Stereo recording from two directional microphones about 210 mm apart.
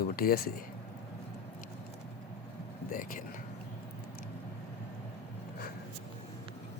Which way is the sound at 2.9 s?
40° left (ahead or behind).